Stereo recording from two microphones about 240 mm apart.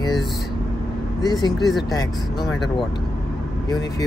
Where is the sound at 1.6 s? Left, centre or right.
Centre.